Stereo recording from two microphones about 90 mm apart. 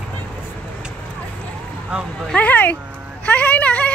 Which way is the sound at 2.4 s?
20° left (ahead or behind).